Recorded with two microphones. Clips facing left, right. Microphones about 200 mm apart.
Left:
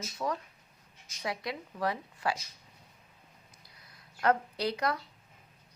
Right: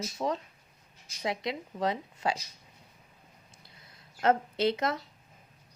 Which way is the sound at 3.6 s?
25° right (ahead or behind).